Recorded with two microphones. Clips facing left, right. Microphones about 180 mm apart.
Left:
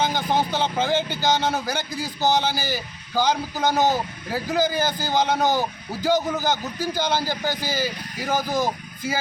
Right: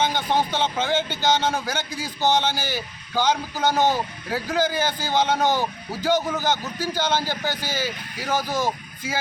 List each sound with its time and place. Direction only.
0.1 s a man's voice: 10° left (ahead or behind)